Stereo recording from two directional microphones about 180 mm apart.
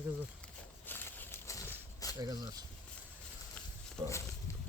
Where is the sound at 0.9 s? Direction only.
10° left (ahead or behind).